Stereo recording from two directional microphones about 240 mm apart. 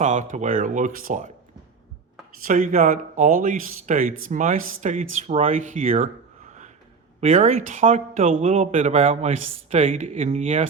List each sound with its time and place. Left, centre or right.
0.0 s speech: right
2.4 s speech: right